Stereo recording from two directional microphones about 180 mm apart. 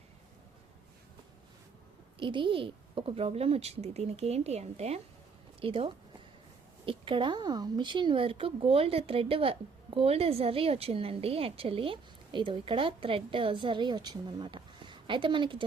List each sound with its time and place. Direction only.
2.1 s a woman's voice: 25° right (ahead or behind)